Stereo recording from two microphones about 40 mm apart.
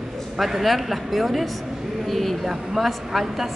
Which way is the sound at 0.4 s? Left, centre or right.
Centre.